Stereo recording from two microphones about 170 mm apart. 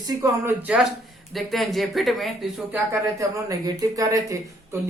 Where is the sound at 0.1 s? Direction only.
20° right (ahead or behind).